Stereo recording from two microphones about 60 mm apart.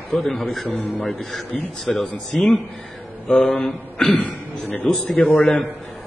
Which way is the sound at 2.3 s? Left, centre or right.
Centre.